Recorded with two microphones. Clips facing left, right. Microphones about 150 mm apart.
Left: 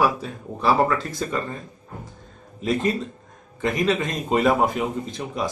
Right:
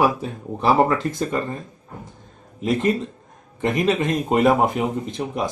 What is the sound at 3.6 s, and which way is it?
Speech, 20° right (ahead or behind).